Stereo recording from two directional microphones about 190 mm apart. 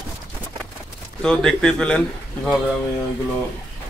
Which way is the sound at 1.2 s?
5° left (ahead or behind).